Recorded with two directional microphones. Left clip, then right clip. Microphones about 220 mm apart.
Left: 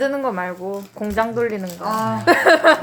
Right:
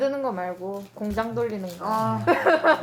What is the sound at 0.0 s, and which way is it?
Speech, 30° left (ahead or behind).